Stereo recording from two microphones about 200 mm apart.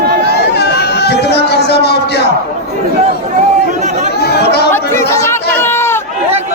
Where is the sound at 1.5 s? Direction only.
55° left (ahead or behind).